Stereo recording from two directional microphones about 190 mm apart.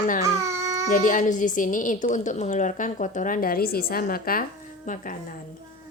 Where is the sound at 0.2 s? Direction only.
15° right (ahead or behind).